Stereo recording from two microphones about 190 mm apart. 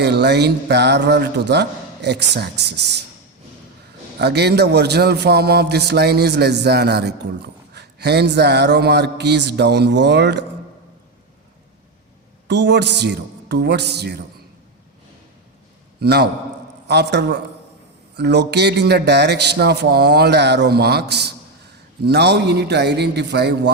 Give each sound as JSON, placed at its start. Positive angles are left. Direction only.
{"t": 0.0, "sound": "a man's voice", "side_deg": -60}
{"t": 4.2, "sound": "a man's voice", "side_deg": -60}
{"t": 12.5, "sound": "a man's voice", "side_deg": -65}
{"t": 16.0, "sound": "a man's voice", "side_deg": -60}